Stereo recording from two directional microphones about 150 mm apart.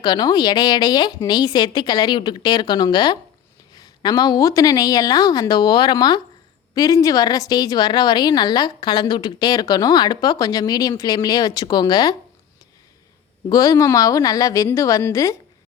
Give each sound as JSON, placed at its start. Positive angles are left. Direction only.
{"t": 0.0, "sound": "a woman's voice", "side_deg": 30}
{"t": 13.5, "sound": "a woman's voice", "side_deg": 20}